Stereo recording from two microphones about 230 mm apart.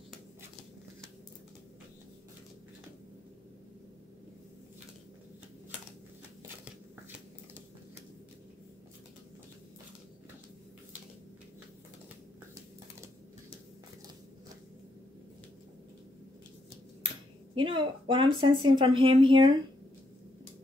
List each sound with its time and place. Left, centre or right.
17.6 s speech: right